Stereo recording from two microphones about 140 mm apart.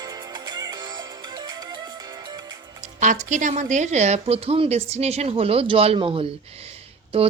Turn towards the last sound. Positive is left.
turn(degrees=-40)  # may be behind; listen again after turning